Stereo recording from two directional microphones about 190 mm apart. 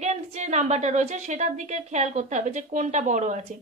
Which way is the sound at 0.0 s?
35° right (ahead or behind).